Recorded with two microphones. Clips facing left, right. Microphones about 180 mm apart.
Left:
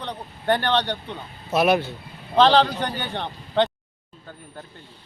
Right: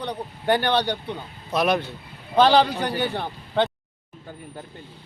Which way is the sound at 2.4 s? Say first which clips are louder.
Even; 10° right (ahead or behind).